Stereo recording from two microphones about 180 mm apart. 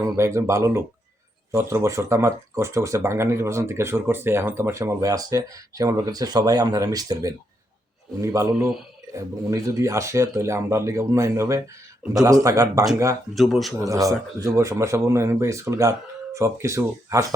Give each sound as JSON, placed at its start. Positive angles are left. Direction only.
{"t": 0.2, "sound": "speech", "side_deg": -15}
{"t": 8.5, "sound": "speech", "side_deg": 0}
{"t": 9.1, "sound": "speech", "side_deg": -15}
{"t": 13.3, "sound": "speech", "side_deg": 0}
{"t": 13.7, "sound": "speech", "side_deg": -20}